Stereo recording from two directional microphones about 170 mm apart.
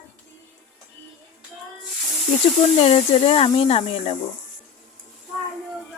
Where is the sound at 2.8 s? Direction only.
35° left (ahead or behind).